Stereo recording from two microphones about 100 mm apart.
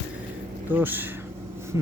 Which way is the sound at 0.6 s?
20° right (ahead or behind).